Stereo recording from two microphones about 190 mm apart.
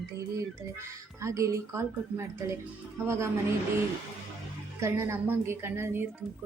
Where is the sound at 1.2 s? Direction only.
15° right (ahead or behind).